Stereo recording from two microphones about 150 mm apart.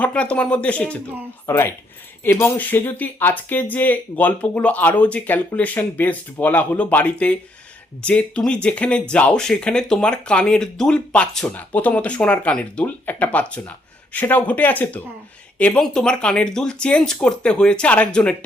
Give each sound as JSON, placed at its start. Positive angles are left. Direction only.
{"t": 0.0, "sound": "speech", "side_deg": 10}